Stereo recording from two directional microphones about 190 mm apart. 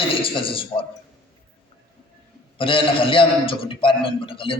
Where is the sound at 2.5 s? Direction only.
25° left (ahead or behind).